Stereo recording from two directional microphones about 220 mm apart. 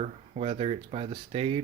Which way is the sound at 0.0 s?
30° right (ahead or behind).